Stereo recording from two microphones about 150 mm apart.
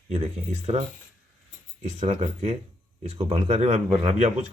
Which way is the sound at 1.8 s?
50° right (ahead or behind).